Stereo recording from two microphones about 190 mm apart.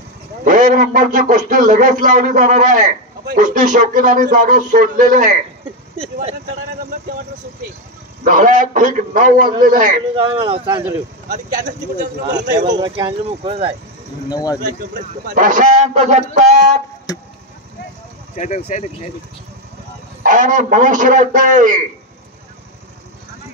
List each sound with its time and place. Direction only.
0.5 s a man's voice: 40° right (ahead or behind)
8.2 s a man's voice: 45° right (ahead or behind)
10.1 s speech: 25° right (ahead or behind)
11.2 s a man's voice: 40° right (ahead or behind)
12.6 s speech: 20° right (ahead or behind)
14.3 s speech: 20° left (ahead or behind)
15.2 s a man's voice: 45° right (ahead or behind)
17.1 s speech: 20° left (ahead or behind)
18.3 s speech: 40° left (ahead or behind)
20.2 s a man's voice: 40° right (ahead or behind)